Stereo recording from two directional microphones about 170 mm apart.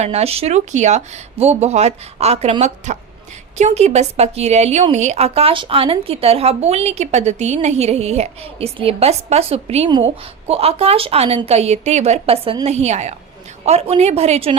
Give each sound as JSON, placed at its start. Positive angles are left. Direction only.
{"t": 0.0, "sound": "a woman's voice", "side_deg": -40}